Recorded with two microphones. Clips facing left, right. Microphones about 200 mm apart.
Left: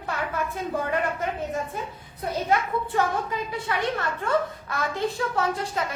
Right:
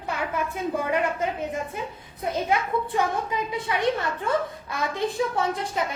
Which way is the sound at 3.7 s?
20° right (ahead or behind).